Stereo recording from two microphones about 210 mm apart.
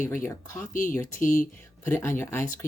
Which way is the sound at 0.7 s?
40° left (ahead or behind).